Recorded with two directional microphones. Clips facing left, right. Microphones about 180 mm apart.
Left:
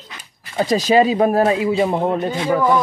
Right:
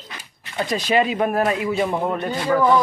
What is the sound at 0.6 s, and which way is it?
Speech, 35° left (ahead or behind).